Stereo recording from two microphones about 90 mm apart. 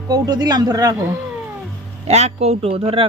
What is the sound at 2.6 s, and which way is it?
Speech, 90° right.